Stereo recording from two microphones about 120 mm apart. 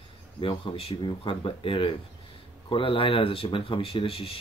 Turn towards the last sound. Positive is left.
turn(degrees=50)  # may be behind; listen again after turning